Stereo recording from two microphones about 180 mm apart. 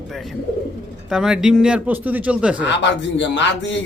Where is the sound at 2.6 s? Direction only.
80° left.